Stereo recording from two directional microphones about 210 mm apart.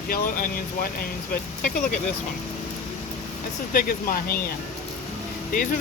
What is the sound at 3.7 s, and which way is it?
Speech, 45° left (ahead or behind).